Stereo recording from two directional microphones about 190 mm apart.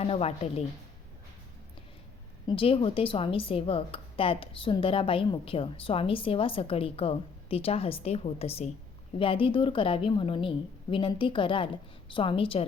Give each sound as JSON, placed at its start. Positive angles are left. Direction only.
{"t": 0.0, "sound": "speech", "side_deg": 30}
{"t": 2.5, "sound": "speech", "side_deg": 30}